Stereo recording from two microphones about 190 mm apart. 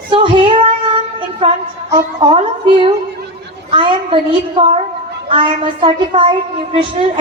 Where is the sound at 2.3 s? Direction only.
25° right (ahead or behind).